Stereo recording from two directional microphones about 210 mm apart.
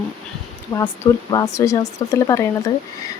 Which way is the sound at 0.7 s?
10° left (ahead or behind).